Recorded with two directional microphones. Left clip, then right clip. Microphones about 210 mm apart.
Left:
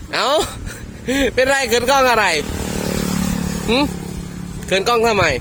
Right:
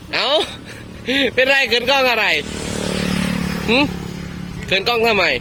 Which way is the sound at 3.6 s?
10° left (ahead or behind).